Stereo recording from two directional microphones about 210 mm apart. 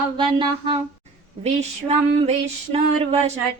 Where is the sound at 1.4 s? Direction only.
30° right (ahead or behind).